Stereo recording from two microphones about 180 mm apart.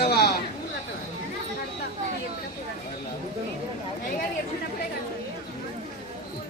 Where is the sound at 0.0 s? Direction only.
60° left (ahead or behind).